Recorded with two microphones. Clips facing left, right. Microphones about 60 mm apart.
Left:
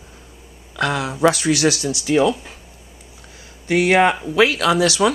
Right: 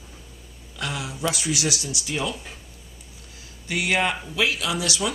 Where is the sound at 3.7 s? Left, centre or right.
Left.